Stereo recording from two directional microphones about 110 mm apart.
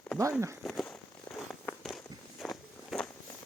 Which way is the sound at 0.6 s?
Centre (ahead or behind).